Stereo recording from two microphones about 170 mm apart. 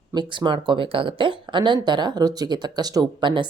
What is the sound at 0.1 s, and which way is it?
Speech, 25° right (ahead or behind).